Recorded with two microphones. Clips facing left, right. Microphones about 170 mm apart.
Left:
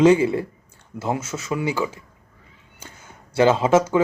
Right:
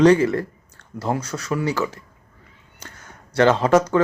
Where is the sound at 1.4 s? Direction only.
25° left (ahead or behind).